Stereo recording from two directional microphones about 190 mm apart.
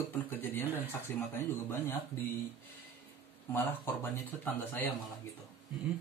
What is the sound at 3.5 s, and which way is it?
Speech, 10° left (ahead or behind).